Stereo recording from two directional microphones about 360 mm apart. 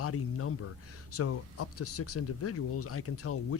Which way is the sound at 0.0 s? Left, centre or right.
Left.